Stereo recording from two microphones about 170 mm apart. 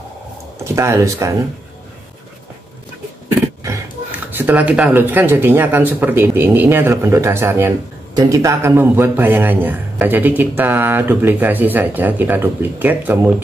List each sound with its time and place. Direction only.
0.7 s a man's voice: 20° right (ahead or behind)
4.3 s a man's voice: 10° right (ahead or behind)